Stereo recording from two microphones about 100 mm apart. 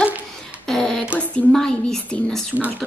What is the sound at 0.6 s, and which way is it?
A woman's voice, 5° left (ahead or behind).